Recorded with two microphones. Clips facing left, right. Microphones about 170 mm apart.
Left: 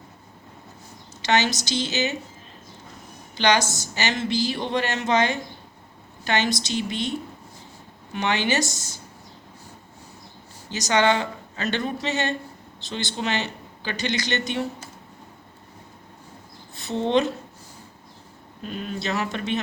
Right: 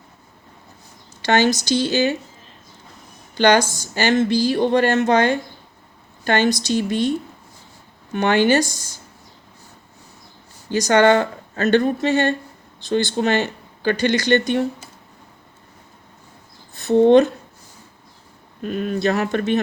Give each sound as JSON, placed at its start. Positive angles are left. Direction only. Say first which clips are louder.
{"t": 1.2, "sound": "speech", "louder": "right 5 dB", "side_deg": -50}
{"t": 3.3, "sound": "a woman's voice", "louder": "right 6 dB", "side_deg": -50}
{"t": 8.1, "sound": "speech", "louder": "right 8 dB", "side_deg": -50}
{"t": 10.7, "sound": "speech", "louder": "right 7 dB", "side_deg": -50}
{"t": 16.7, "sound": "a woman's voice", "louder": "right 10 dB", "side_deg": -50}
{"t": 18.6, "sound": "speech", "louder": "right 9 dB", "side_deg": -50}